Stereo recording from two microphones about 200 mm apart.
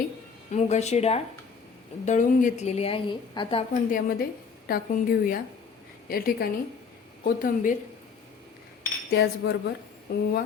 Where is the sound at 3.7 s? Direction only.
40° left (ahead or behind).